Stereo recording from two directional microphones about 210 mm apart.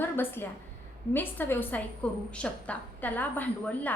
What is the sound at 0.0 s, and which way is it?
A woman's voice, 10° left (ahead or behind).